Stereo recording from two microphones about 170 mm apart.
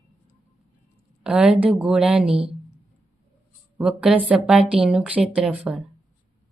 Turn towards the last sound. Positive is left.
turn(degrees=-5)  # may be behind; listen again after turning